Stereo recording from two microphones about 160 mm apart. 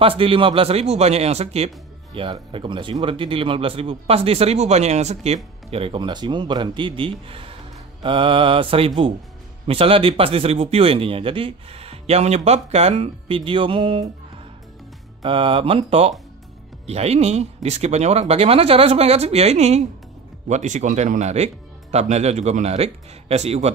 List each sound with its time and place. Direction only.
0.2 s speech: 35° right (ahead or behind)
15.2 s speech: 35° right (ahead or behind)